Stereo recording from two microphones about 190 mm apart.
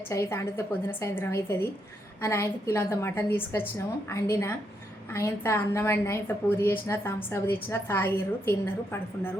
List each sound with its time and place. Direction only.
0.1 s a woman's voice: 15° left (ahead or behind)